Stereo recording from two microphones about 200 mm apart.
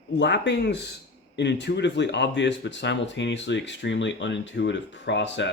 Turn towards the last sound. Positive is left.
turn(degrees=60)  # may be behind; listen again after turning